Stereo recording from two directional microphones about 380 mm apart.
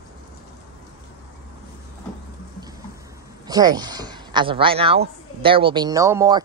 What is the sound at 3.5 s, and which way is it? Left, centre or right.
Speech, centre.